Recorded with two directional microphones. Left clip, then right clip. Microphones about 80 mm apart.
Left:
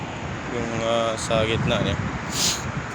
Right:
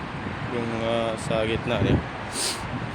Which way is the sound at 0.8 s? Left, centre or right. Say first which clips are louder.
Left 4 dB; right.